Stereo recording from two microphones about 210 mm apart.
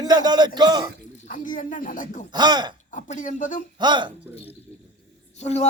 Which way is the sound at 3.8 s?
20° right (ahead or behind).